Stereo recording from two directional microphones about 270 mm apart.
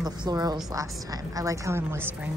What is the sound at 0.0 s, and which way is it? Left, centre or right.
A woman's voice, centre.